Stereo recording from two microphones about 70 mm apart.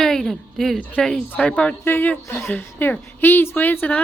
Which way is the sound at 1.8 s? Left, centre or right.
Left.